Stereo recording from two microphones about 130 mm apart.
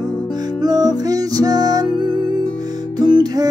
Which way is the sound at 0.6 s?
30° right (ahead or behind).